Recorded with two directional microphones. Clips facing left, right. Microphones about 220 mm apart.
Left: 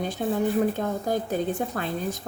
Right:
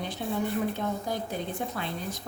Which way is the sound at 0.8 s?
45° left (ahead or behind).